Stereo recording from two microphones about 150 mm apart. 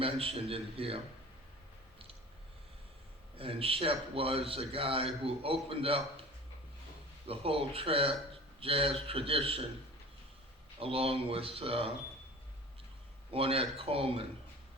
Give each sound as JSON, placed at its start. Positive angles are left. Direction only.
{"t": 0.0, "sound": "a man's voice", "side_deg": -40}
{"t": 3.3, "sound": "a man's voice", "side_deg": -40}
{"t": 7.3, "sound": "a man's voice", "side_deg": -40}
{"t": 10.8, "sound": "a man's voice", "side_deg": -40}
{"t": 13.3, "sound": "a man's voice", "side_deg": -40}